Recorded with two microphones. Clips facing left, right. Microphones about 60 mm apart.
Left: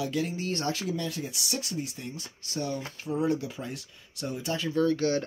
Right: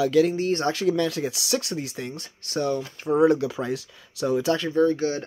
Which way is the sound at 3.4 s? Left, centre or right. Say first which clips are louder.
Right 9 dB; right.